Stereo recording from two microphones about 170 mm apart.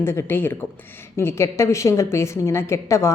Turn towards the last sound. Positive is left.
turn(degrees=15)  # may be behind; listen again after turning